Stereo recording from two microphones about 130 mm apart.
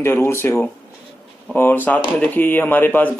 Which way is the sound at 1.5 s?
15° left (ahead or behind).